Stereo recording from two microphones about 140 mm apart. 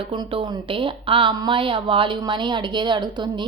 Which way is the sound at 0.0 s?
35° right (ahead or behind).